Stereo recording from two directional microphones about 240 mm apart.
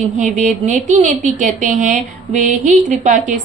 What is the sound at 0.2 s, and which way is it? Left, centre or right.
Speech, right.